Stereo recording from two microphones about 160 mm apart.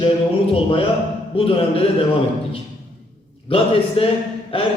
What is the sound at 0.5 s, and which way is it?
A man's voice, 35° left (ahead or behind).